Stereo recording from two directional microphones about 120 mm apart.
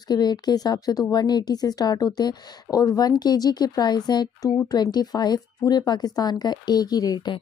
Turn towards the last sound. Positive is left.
turn(degrees=35)  # may be behind; listen again after turning